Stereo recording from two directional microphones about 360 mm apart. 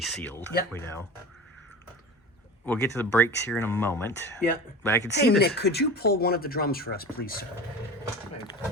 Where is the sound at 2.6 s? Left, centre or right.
Centre.